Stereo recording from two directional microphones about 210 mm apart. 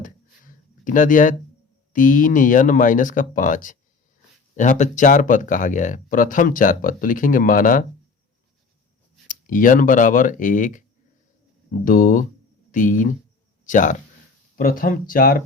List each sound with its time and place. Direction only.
0.0 s a sound: 40° left (ahead or behind)
1.9 s speech: 40° left (ahead or behind)
9.2 s speech: 40° left (ahead or behind)